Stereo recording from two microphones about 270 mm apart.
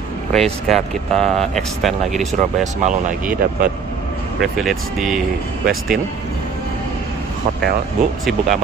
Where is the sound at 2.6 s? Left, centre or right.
Right.